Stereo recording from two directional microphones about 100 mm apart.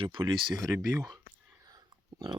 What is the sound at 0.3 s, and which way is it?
Speech, 50° right (ahead or behind).